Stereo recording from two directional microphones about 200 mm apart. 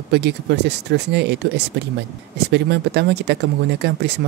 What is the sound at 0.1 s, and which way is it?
Speech, 55° right (ahead or behind).